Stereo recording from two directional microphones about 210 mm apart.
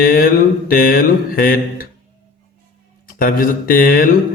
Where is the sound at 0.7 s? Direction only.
45° left (ahead or behind).